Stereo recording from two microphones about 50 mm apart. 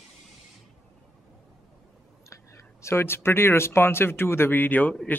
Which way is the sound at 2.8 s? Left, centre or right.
Left.